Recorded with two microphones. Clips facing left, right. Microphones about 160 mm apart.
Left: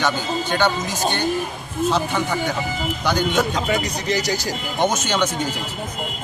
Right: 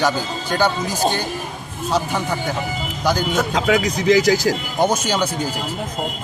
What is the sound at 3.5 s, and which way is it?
Speech, 90° right.